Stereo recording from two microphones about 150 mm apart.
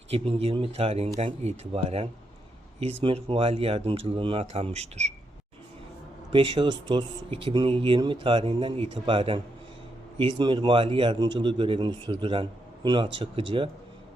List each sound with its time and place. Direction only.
0.1 s speech: 40° right (ahead or behind)
6.3 s speech: 35° right (ahead or behind)